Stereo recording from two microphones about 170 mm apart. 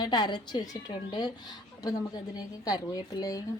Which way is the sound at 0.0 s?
25° left (ahead or behind).